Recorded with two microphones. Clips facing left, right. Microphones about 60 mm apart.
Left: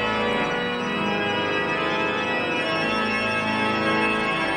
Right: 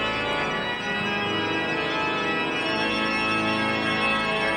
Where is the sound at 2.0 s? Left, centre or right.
Centre.